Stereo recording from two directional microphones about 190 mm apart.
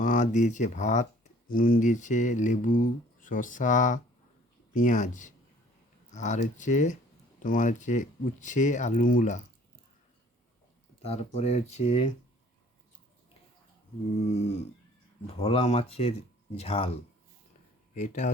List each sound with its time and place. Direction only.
0.0 s speech: 45° left (ahead or behind)
11.0 s speech: 35° left (ahead or behind)
14.3 s speech: 35° left (ahead or behind)